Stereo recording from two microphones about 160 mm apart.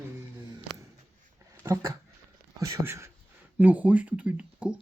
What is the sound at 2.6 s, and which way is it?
Speech, 20° right (ahead or behind).